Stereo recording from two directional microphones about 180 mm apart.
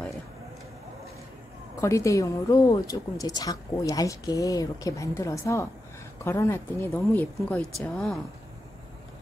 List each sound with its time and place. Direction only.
1.8 s a woman's voice: 15° left (ahead or behind)